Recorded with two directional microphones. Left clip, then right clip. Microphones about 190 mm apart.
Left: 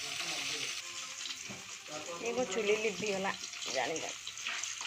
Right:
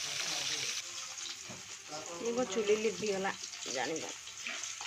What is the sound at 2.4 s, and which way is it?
Speech, 25° right (ahead or behind).